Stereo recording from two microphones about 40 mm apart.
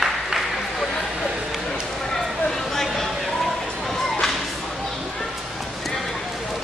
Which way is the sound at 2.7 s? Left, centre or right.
Centre.